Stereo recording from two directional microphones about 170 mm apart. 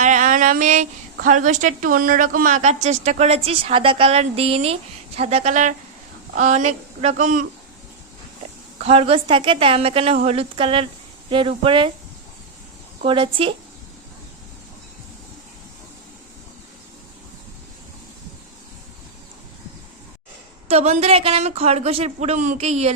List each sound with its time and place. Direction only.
0.0 s a sound: 50° right (ahead or behind)
1.2 s a woman's voice: 50° right (ahead or behind)
8.8 s a woman's voice: 35° right (ahead or behind)
13.1 s a woman's voice: 30° right (ahead or behind)
20.7 s a woman's voice: 40° right (ahead or behind)